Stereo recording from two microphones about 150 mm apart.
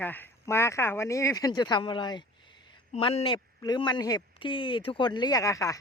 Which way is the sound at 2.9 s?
40° left (ahead or behind).